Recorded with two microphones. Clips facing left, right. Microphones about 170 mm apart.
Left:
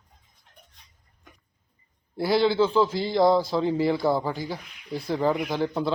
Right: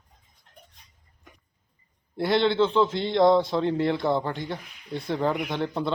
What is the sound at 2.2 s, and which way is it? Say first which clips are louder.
A man's voice: left 1 dB; 5° left (ahead or behind).